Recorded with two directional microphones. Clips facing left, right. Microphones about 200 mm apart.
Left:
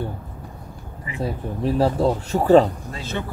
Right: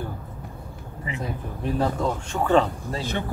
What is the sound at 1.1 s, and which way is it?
Speech, 35° left (ahead or behind).